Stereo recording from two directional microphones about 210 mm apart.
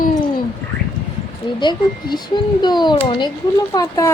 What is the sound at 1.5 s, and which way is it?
A woman's voice, 20° left (ahead or behind).